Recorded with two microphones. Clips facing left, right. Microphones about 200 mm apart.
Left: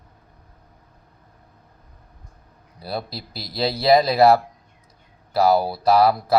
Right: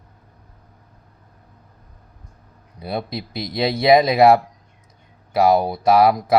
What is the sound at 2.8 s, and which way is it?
Speech, 20° right (ahead or behind).